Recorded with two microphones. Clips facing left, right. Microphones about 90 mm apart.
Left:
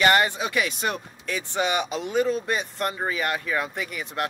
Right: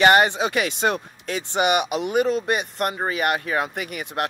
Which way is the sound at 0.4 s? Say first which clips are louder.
Right 4 dB; 80° right.